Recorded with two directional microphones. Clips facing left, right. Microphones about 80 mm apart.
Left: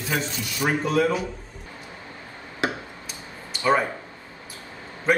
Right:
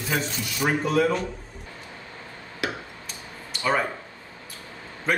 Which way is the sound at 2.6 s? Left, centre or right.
Left.